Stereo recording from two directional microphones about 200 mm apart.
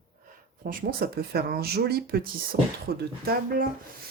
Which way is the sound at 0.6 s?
45° right (ahead or behind).